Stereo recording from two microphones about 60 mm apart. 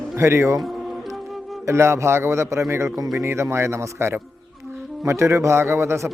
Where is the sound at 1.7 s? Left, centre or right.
Right.